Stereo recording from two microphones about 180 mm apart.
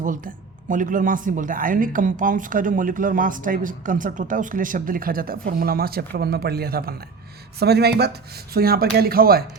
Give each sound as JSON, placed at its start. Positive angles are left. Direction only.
{"t": 0.0, "sound": "speech", "side_deg": -45}